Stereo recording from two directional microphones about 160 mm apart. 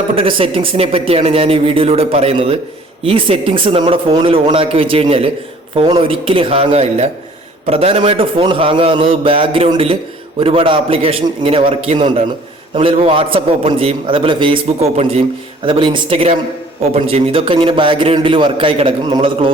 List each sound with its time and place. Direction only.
0.2 s a man's voice: 35° right (ahead or behind)